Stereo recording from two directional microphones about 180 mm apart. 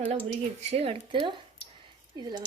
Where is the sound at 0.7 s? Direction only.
35° right (ahead or behind).